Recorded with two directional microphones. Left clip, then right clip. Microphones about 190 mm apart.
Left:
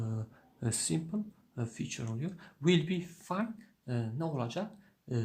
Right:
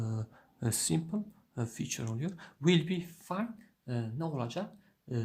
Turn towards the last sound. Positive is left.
turn(degrees=0)  # may be behind; listen again after turning